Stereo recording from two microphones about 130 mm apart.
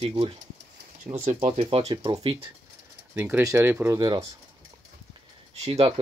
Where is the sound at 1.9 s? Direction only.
40° right (ahead or behind).